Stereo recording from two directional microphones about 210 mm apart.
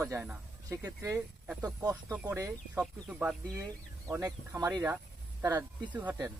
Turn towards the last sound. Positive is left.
turn(degrees=-5)  # may be behind; listen again after turning